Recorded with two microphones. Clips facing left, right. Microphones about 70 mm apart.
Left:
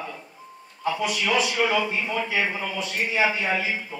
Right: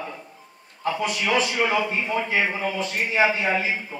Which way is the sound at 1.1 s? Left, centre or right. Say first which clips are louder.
Right 2 dB; right.